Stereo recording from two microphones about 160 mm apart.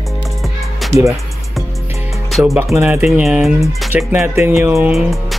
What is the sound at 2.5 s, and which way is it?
Speech, 15° right (ahead or behind).